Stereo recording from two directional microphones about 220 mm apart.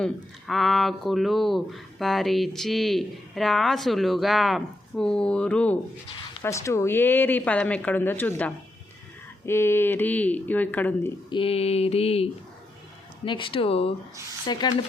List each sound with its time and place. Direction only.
0.0 s speech: centre (ahead or behind)
11.3 s a sound: 25° left (ahead or behind)
14.4 s speech: 20° left (ahead or behind)